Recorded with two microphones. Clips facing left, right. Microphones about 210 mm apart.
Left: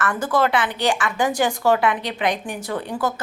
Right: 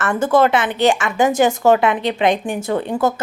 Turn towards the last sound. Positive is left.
turn(degrees=-25)  # may be behind; listen again after turning